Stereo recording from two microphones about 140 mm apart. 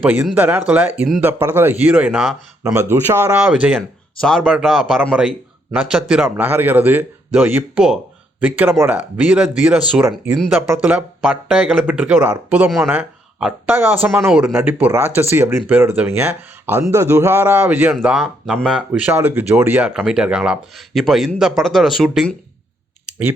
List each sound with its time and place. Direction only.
0.0 s speech: 10° right (ahead or behind)
2.7 s speech: 20° right (ahead or behind)
3.8 s speech: 5° left (ahead or behind)